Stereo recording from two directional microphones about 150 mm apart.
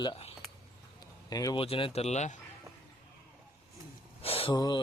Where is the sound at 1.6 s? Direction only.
40° left (ahead or behind).